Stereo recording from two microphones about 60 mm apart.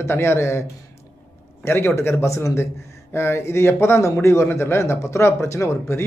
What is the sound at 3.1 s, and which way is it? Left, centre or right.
Speech, left.